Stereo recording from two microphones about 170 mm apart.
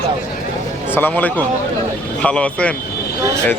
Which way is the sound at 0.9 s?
10° left (ahead or behind).